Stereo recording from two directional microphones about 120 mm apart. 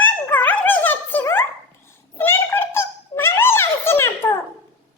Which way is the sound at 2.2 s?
20° left (ahead or behind).